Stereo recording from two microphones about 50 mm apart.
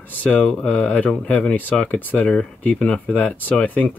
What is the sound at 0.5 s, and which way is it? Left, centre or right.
Speech, centre.